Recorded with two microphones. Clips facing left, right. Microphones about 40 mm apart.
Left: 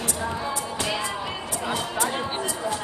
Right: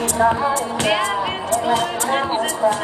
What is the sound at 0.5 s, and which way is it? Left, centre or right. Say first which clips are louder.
Music: right 9 dB; right.